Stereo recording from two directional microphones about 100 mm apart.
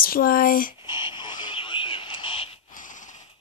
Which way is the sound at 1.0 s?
50° left (ahead or behind).